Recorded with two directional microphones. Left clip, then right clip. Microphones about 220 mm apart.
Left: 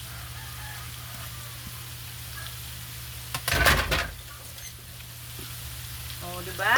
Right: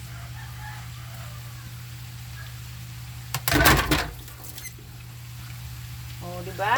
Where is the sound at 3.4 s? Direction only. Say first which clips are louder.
Right 3 dB; 50° right (ahead or behind).